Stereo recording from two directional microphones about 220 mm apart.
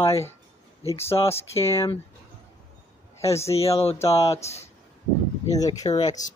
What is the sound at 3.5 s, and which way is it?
Speech, 25° left (ahead or behind).